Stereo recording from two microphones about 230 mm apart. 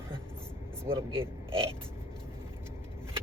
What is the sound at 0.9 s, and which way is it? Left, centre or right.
Speech, right.